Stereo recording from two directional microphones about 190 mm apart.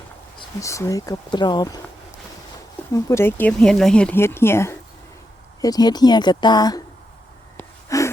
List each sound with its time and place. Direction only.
0.3 s speech: 15° left (ahead or behind)
2.9 s speech: 15° left (ahead or behind)
7.5 s wheeze: 15° left (ahead or behind)